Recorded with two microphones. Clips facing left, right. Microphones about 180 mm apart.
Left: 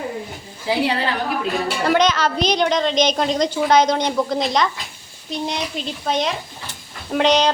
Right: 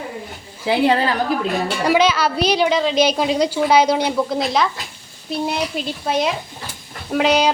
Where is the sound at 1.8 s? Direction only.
5° right (ahead or behind).